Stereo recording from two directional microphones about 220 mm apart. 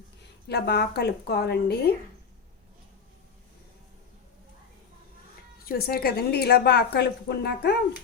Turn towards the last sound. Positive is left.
turn(degrees=50)  # may be behind; listen again after turning